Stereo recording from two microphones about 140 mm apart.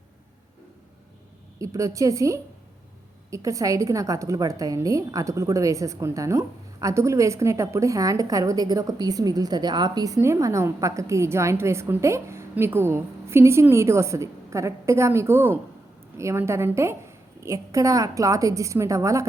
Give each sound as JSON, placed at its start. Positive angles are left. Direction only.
{"t": 1.5, "sound": "a woman's voice", "side_deg": -25}